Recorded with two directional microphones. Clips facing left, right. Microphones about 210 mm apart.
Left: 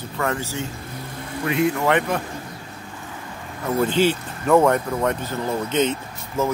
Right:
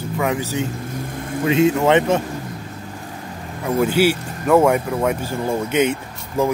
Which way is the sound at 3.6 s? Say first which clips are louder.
Right 2 dB; 10° right (ahead or behind).